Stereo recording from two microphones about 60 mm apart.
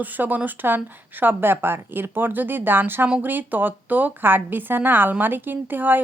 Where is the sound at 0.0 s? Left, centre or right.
Right.